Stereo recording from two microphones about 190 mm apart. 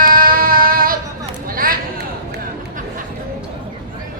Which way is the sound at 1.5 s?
50° right (ahead or behind).